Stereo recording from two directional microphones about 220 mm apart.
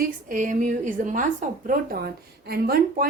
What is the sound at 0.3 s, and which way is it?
A woman's voice, 35° right (ahead or behind).